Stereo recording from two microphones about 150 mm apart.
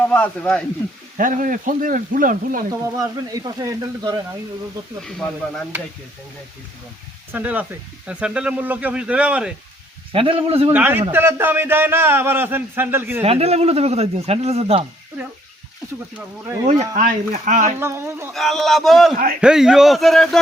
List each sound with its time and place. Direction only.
0.1 s speech: 10° left (ahead or behind)
1.1 s speech: 65° right (ahead or behind)
2.8 s speech: 25° right (ahead or behind)
7.3 s speech: 10° right (ahead or behind)
10.1 s a man's voice: 35° right (ahead or behind)
10.7 s speech: 10° right (ahead or behind)
13.2 s speech: 40° right (ahead or behind)
16.6 s speech: 50° right (ahead or behind)
17.7 s speech: 15° right (ahead or behind)
18.3 s a man's voice: centre (ahead or behind)